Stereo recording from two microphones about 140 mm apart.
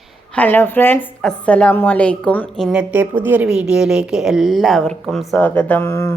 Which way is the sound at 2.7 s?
10° right (ahead or behind).